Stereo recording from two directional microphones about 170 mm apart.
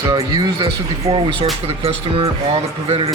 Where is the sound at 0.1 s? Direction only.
25° right (ahead or behind).